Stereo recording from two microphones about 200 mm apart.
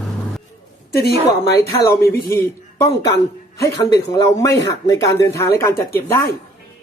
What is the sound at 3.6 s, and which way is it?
Speech, 15° left (ahead or behind).